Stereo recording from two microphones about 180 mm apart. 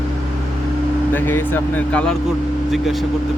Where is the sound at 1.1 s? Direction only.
10° left (ahead or behind).